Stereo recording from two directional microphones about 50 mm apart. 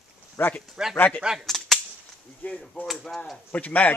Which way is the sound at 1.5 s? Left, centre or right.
Centre.